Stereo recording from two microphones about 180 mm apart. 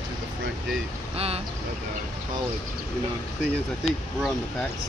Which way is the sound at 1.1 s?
35° right (ahead or behind).